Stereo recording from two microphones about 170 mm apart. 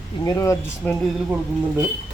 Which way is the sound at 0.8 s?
5° left (ahead or behind).